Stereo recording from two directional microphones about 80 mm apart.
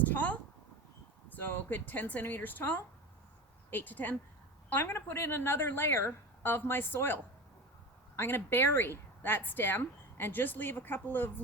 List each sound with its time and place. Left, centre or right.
0.0 s a sound: centre
1.3 s speech: left
8.2 s speech: left